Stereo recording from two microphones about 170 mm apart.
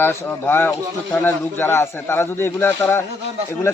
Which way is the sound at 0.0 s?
10° left (ahead or behind).